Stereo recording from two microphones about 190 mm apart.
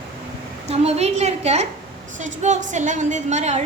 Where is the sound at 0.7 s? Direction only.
35° right (ahead or behind).